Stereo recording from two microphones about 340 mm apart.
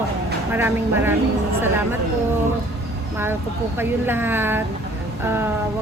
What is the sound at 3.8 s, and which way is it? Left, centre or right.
Speech, centre.